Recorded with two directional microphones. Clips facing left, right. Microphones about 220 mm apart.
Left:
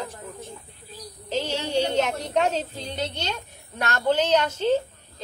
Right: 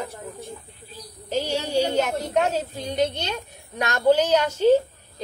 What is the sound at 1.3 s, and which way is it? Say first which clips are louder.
A woman's voice: right 2 dB; 10° right (ahead or behind).